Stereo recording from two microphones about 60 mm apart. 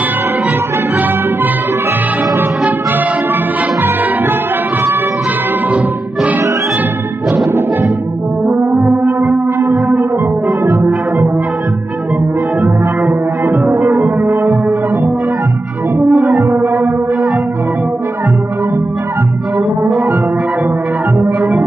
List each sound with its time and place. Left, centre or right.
7.3 s music: right
8.5 s brass instrument: right
10.6 s music: right
16.1 s french horn: centre
16.3 s music: right
21.4 s music: centre